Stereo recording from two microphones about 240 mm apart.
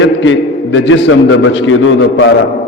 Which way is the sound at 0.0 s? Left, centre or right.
Left.